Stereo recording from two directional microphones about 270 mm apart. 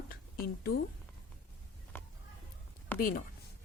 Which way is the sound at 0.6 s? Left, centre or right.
Left.